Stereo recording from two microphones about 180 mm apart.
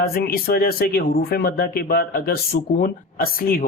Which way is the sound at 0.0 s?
55° left (ahead or behind).